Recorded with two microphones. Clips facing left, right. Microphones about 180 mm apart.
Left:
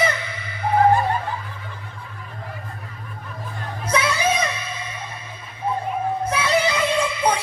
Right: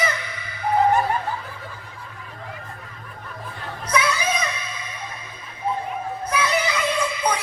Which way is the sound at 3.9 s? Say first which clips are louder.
Even; 25° left (ahead or behind).